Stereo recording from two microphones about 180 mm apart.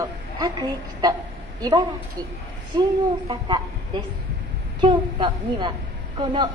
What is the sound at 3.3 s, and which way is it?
A woman's voice, 25° right (ahead or behind).